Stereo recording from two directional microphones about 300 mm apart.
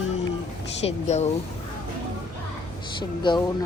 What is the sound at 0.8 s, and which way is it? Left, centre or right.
Speech, left.